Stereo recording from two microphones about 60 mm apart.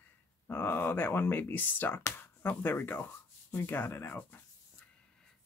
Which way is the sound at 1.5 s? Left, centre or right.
Left.